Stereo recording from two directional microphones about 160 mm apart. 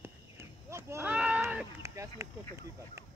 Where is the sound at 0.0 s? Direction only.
15° right (ahead or behind).